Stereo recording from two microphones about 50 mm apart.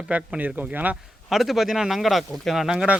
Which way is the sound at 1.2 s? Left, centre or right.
Centre.